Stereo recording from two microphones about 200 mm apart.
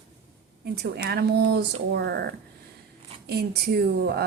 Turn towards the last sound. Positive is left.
turn(degrees=-50)  # may be behind; listen again after turning